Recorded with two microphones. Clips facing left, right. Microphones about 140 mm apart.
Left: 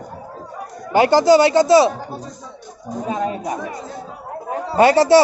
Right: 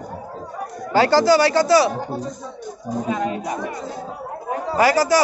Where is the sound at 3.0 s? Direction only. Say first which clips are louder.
Left 2 dB; 30° left (ahead or behind).